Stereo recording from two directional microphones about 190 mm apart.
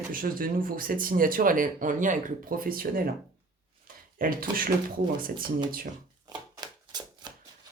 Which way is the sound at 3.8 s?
50° right (ahead or behind).